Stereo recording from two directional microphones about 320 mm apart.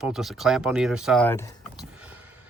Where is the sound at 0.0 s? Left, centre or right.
Centre.